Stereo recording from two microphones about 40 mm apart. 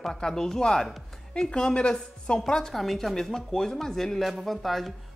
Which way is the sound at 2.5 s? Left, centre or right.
Centre.